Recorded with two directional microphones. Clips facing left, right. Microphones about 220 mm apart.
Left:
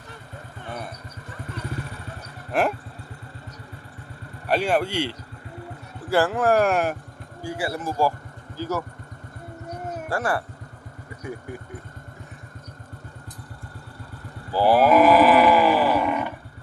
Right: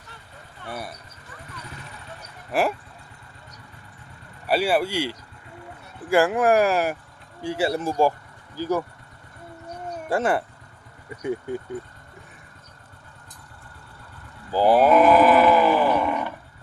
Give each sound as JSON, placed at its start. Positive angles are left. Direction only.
{"t": 0.7, "sound": "speech", "side_deg": -10}
{"t": 2.5, "sound": "speech", "side_deg": -5}
{"t": 4.4, "sound": "speech", "side_deg": -5}
{"t": 7.4, "sound": "speech", "side_deg": -25}
{"t": 8.5, "sound": "speech", "side_deg": -10}
{"t": 10.1, "sound": "speech", "side_deg": -20}
{"t": 14.5, "sound": "speech", "side_deg": -15}
{"t": 14.8, "sound": "livestock", "side_deg": 5}